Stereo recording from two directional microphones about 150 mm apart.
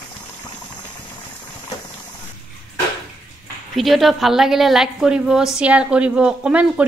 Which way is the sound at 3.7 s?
Centre (ahead or behind).